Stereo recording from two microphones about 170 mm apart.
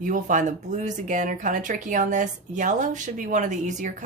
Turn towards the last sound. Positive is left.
turn(degrees=-45)  # may be behind; listen again after turning